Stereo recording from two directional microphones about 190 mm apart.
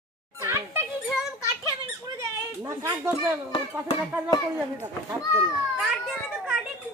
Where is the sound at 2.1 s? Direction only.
15° right (ahead or behind).